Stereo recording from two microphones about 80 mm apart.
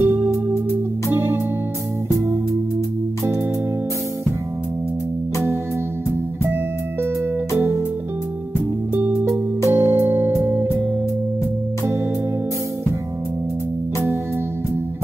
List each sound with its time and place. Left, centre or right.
0.0 s music: right
7.5 s music: right
9.3 s music: right